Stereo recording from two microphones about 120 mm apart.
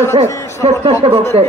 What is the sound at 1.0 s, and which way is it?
Speech, 45° right (ahead or behind).